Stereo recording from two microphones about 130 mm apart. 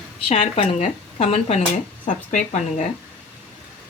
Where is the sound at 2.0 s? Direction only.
65° left (ahead or behind).